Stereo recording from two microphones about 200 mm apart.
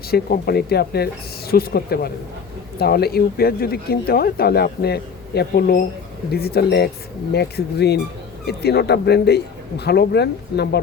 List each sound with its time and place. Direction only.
0.1 s a man's voice: 50° left (ahead or behind)